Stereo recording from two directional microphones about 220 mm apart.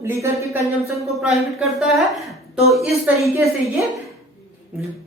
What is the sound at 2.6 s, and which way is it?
Speech, centre (ahead or behind).